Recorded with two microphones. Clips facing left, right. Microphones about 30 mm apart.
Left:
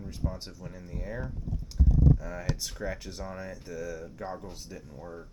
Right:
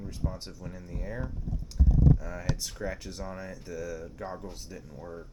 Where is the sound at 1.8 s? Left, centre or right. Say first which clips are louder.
Even; centre.